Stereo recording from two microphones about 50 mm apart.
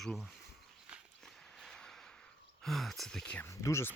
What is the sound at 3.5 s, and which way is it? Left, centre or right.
Speech, left.